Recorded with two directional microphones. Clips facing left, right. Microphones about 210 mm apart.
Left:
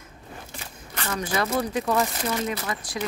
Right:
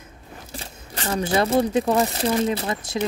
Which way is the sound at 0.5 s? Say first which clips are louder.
Right 4 dB; 30° right (ahead or behind).